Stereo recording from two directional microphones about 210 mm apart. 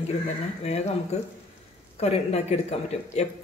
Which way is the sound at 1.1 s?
30° left (ahead or behind).